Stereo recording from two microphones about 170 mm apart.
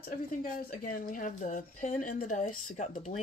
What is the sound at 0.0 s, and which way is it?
Speech, 55° left (ahead or behind).